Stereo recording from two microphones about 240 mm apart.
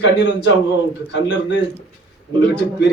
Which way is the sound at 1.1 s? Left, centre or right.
Left.